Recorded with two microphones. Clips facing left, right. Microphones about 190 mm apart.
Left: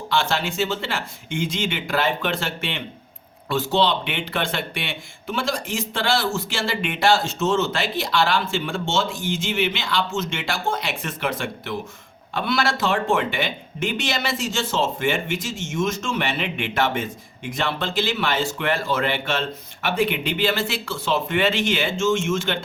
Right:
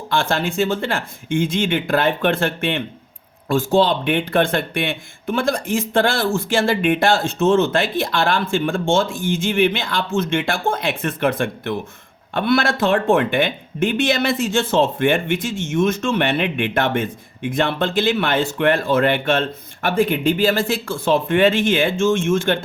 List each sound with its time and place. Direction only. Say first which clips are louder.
0.1 s speech: right 3 dB; 50° right (ahead or behind)